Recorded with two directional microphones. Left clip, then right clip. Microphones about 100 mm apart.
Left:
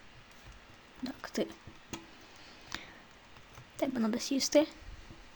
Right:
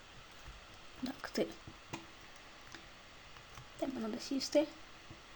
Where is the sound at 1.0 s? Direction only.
15° left (ahead or behind).